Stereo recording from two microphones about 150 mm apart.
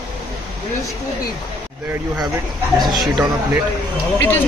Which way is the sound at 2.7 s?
Centre (ahead or behind).